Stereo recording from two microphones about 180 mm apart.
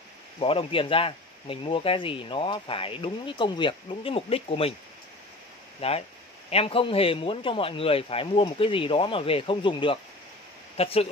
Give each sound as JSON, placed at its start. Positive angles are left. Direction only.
{"t": 0.4, "sound": "speech", "side_deg": 30}
{"t": 5.8, "sound": "speech", "side_deg": 35}